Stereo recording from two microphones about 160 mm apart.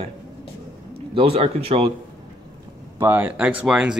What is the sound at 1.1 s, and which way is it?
Speech, 35° right (ahead or behind).